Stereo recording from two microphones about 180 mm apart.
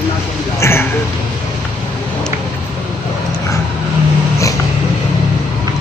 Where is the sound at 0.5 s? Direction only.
15° left (ahead or behind).